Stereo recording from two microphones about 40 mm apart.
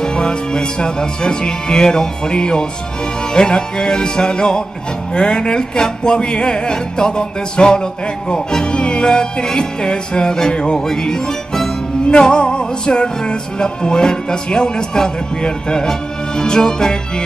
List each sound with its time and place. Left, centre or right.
0.0 s music: left